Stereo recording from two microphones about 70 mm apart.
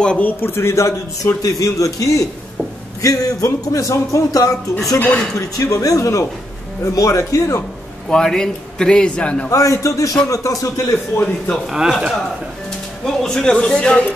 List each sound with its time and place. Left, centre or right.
0.0 s a man's voice: centre
0.4 s a man's voice: left
4.9 s speech: left
5.3 s a man's voice: left
8.1 s a man's voice: centre
9.5 s a man's voice: left
11.7 s speech: centre
13.0 s a man's voice: centre